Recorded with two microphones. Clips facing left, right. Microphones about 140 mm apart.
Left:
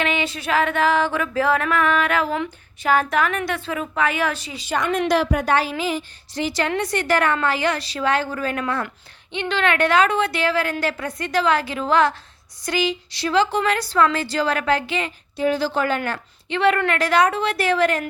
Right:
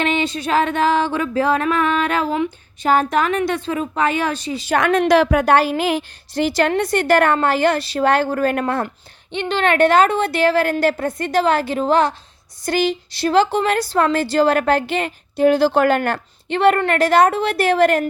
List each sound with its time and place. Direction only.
0.0 s music: 30° right (ahead or behind)
4.7 s a woman's voice: 80° right; by 8.6 s 50° right (ahead or behind)
9.3 s a woman's voice: 40° right (ahead or behind)
9.9 s a woman's voice: 50° right (ahead or behind)
12.6 s a woman's voice: 55° right (ahead or behind)
16.0 s a woman's voice: 45° right (ahead or behind)